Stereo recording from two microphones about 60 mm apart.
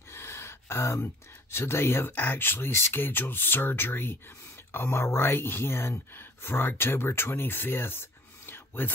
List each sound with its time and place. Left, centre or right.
0.1 s gasp: left
1.6 s speech: left